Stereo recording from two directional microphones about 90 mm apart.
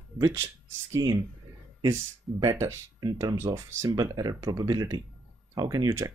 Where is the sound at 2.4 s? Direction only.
30° right (ahead or behind); by 5.9 s 45° right (ahead or behind).